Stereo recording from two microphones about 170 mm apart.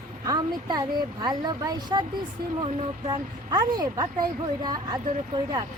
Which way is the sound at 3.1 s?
25° right (ahead or behind).